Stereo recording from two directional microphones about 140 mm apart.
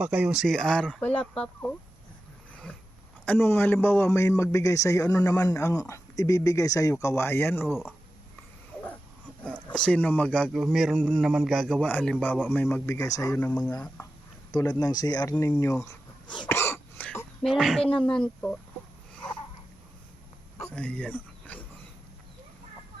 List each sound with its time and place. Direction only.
0.0 s speech: 10° right (ahead or behind); by 1.7 s 10° left (ahead or behind)
3.2 s a man's voice: 15° left (ahead or behind)
7.7 s speech: 5° right (ahead or behind)
9.6 s speech: 5° left (ahead or behind)
10.5 s a man's voice: 5° right (ahead or behind); by 13.3 s 25° left (ahead or behind)
13.3 s speech: 10° left (ahead or behind)
14.5 s a man's voice: 25° left (ahead or behind)
15.5 s speech: 10° left (ahead or behind)
15.8 s a sound: 25° left (ahead or behind)
16.5 s throat clearing: 15° left (ahead or behind)
17.5 s speech: centre (ahead or behind)
19.1 s a sound: 10° left (ahead or behind)
20.7 s speech: 10° left (ahead or behind)